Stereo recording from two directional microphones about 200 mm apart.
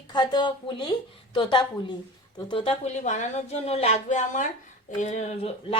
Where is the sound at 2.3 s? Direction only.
25° left (ahead or behind).